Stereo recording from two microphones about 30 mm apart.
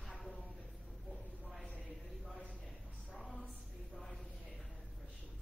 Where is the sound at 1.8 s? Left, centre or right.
Centre.